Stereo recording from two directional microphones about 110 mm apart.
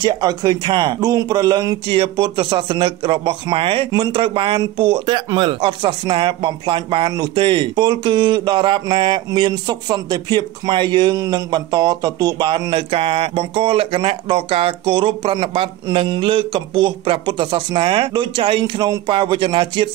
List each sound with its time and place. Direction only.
0.0 s a man's voice: 40° right (ahead or behind)
12.9 s a man's voice: 65° right (ahead or behind); by 19.9 s 45° right (ahead or behind)